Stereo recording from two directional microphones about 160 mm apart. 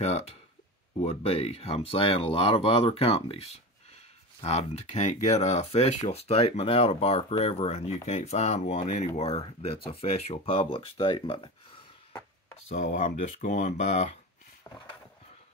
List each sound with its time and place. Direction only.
0.9 s speech: 40° left (ahead or behind)
12.1 s chopping: 15° left (ahead or behind)
12.6 s speech: 50° left (ahead or behind)